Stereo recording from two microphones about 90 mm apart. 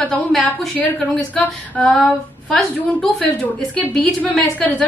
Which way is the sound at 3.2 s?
20° left (ahead or behind).